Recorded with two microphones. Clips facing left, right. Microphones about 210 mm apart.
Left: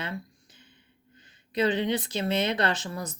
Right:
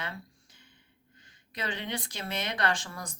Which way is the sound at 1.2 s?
20° left (ahead or behind).